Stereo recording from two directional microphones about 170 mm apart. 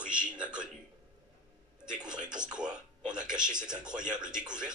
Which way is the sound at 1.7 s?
5° right (ahead or behind).